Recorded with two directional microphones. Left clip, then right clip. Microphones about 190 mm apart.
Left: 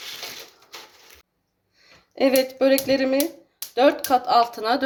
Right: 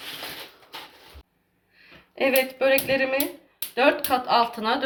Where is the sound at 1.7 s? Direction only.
70° left (ahead or behind).